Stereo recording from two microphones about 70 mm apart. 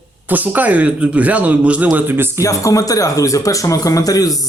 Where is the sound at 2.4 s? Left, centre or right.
Left.